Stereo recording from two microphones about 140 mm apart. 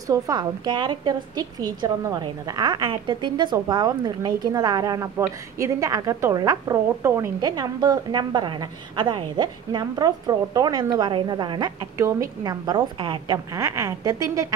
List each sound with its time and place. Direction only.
0.0 s a woman's voice: 25° right (ahead or behind)
7.4 s a woman's voice: 30° right (ahead or behind)
13.5 s a woman's voice: 25° right (ahead or behind)